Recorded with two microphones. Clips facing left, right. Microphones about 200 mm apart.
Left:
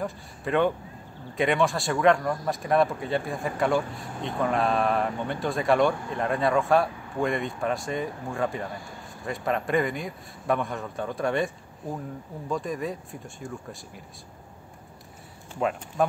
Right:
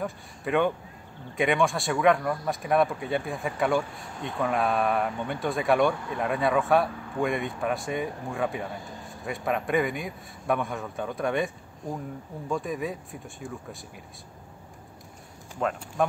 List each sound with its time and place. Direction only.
0.0 s speech: centre (ahead or behind)
15.6 s speech: 5° left (ahead or behind)